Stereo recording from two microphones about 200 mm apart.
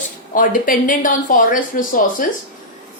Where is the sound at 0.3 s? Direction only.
45° left (ahead or behind).